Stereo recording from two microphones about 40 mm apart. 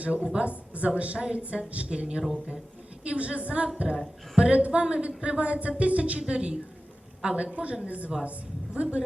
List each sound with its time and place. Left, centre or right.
0.0 s a woman's voice: right
1.9 s a woman's voice: right
7.5 s a woman's voice: right